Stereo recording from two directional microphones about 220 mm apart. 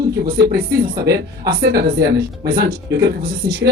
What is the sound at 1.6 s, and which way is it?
Speech, 45° right (ahead or behind).